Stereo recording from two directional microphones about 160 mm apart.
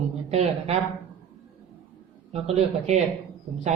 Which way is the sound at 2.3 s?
40° right (ahead or behind).